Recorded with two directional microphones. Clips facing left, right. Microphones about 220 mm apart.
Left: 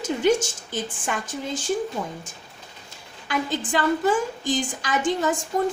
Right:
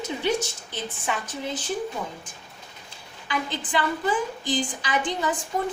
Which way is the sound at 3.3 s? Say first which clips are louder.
Left 4 dB; 45° left (ahead or behind).